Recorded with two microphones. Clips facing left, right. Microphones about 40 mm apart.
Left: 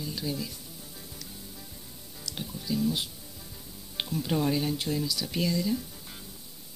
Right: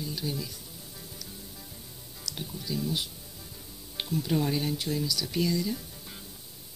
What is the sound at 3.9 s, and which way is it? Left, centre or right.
Music, centre.